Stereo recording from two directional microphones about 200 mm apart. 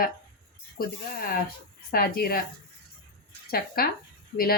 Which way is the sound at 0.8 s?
50° left (ahead or behind).